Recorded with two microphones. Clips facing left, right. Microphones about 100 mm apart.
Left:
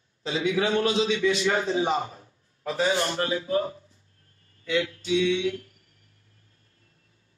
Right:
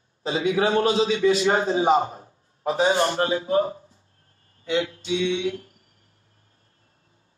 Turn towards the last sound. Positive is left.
turn(degrees=-30)  # may be behind; listen again after turning